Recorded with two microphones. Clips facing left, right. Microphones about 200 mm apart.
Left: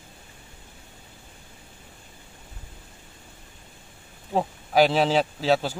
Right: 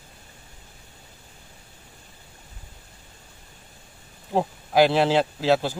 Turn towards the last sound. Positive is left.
turn(degrees=0)  # may be behind; listen again after turning